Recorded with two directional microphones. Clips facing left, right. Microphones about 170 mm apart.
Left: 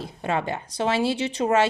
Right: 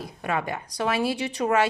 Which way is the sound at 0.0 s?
25° left (ahead or behind).